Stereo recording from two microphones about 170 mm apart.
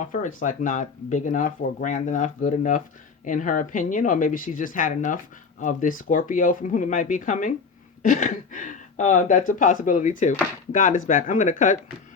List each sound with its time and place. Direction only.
0.0 s speech: 50° left (ahead or behind)